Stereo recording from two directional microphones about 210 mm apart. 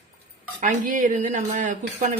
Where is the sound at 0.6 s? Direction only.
40° right (ahead or behind).